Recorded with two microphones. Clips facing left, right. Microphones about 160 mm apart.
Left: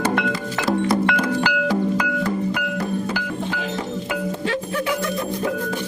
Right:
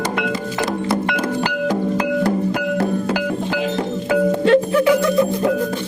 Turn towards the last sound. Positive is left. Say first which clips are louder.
# right 10 dB
turn(degrees=-65)  # may be behind; listen again after turning